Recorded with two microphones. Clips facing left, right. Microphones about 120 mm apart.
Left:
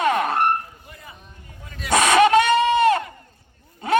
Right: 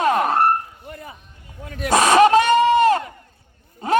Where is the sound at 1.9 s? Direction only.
40° right (ahead or behind).